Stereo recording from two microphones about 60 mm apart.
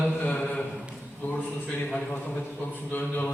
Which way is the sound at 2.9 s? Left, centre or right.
Left.